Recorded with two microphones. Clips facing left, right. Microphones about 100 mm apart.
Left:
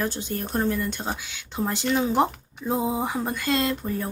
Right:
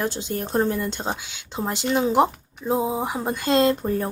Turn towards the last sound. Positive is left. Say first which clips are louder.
# right 6 dB
turn(degrees=-35)  # may be behind; listen again after turning